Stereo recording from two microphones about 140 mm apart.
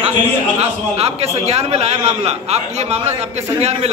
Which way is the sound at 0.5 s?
50° right (ahead or behind).